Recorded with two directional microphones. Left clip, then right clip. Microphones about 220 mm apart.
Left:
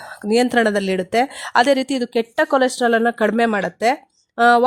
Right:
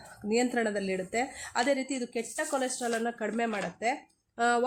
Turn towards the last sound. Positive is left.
turn(degrees=45)  # may be behind; listen again after turning